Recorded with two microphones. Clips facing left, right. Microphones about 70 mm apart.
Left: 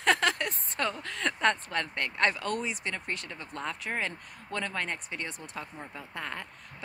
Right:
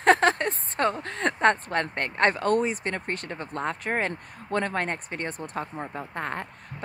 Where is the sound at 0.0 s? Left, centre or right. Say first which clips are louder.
Right 6 dB; right.